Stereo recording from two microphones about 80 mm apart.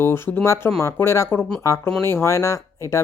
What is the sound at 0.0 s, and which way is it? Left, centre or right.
Speech, left.